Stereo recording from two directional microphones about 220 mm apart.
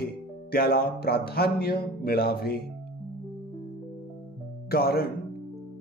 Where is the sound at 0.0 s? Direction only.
45° left (ahead or behind).